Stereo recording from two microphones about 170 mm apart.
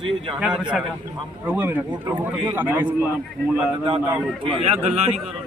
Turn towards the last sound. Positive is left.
turn(degrees=-40)  # may be behind; listen again after turning